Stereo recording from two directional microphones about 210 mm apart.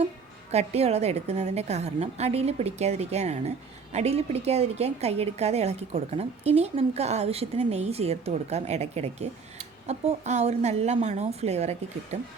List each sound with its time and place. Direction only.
0.5 s a woman's voice: 30° right (ahead or behind)